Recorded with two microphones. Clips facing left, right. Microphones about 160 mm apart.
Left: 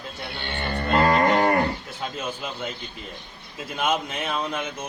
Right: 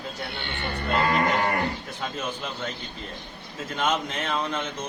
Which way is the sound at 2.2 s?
10° left (ahead or behind).